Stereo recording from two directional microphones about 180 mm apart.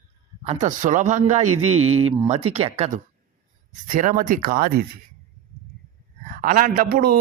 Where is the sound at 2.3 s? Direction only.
35° right (ahead or behind); by 4.8 s 50° right (ahead or behind).